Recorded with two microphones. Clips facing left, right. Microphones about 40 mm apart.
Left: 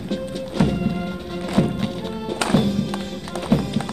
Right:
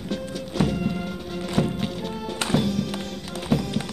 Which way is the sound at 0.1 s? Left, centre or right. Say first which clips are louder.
Left 3 dB; centre.